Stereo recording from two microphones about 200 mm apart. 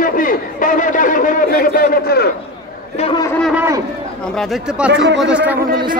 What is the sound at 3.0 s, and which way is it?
Speech, 25° left (ahead or behind).